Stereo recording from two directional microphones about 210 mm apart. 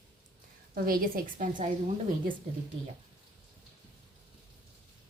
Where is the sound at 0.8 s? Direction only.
45° right (ahead or behind).